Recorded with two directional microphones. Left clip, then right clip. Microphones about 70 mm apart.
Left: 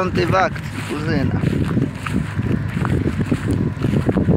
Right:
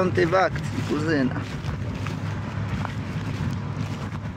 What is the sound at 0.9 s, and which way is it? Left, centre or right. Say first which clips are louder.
Speech: left 1 dB; right.